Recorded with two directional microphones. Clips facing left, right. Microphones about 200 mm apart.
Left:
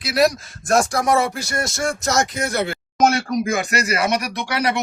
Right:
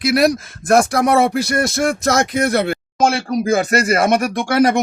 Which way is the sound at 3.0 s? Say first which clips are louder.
Even; 30° right (ahead or behind).